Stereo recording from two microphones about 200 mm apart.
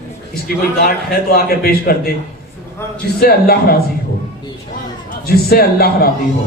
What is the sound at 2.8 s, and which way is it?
Speech, 10° left (ahead or behind).